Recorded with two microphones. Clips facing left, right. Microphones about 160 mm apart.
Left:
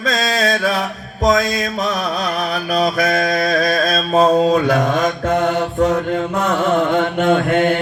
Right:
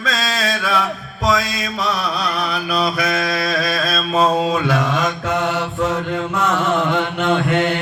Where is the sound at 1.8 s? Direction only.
45° left (ahead or behind).